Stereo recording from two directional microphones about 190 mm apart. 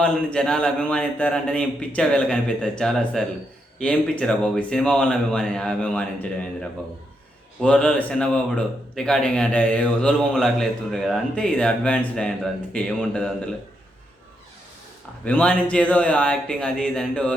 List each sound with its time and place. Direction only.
0.0 s speech: 5° left (ahead or behind)
15.2 s speech: 5° left (ahead or behind)